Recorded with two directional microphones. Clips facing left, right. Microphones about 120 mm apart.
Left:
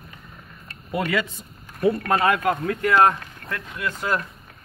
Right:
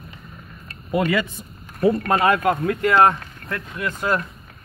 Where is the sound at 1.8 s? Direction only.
30° right (ahead or behind).